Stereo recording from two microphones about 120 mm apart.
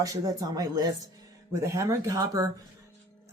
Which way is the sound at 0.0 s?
30° right (ahead or behind).